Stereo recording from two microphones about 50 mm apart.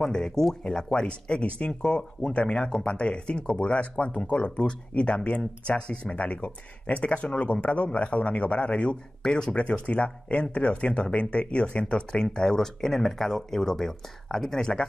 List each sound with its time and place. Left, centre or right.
0.0 s speech: centre
1.0 s speech: left